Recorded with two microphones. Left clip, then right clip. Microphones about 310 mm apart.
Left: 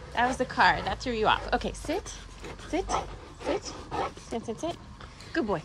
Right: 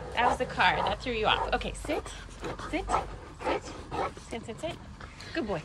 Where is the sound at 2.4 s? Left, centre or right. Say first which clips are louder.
Right 7 dB; centre.